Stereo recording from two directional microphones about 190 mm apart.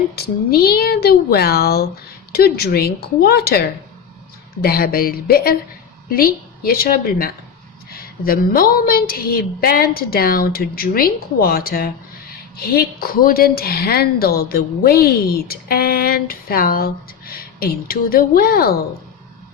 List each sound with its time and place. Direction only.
0.2 s a woman's voice: 55° left (ahead or behind)